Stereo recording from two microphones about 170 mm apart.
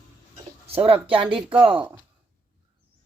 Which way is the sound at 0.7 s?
35° right (ahead or behind).